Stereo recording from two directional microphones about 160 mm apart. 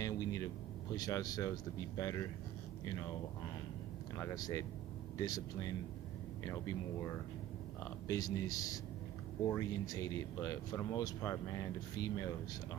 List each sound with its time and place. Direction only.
0.0 s air conditioning: 20° left (ahead or behind)
0.9 s speech: 25° left (ahead or behind)
4.2 s speech: 20° left (ahead or behind)
7.8 s speech: 20° left (ahead or behind)